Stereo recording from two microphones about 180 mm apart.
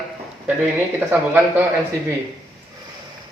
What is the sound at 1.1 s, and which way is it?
Speech, 10° right (ahead or behind).